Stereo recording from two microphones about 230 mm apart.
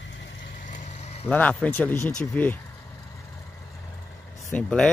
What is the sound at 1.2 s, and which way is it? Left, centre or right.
Speech, centre.